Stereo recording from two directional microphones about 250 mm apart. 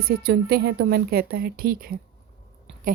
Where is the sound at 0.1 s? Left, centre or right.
Right.